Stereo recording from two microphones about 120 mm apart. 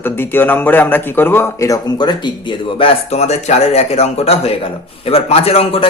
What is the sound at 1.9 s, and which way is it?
Speech, 40° left (ahead or behind).